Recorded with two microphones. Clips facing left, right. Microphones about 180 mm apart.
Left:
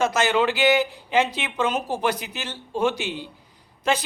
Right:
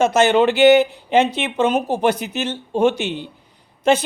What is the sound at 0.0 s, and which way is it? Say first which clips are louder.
Speech: right 6 dB; 25° right (ahead or behind).